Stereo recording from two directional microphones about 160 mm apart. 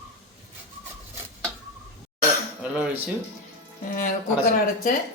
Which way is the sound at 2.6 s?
10° right (ahead or behind).